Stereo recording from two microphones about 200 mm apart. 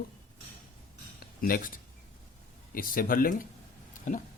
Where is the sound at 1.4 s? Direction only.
45° left (ahead or behind).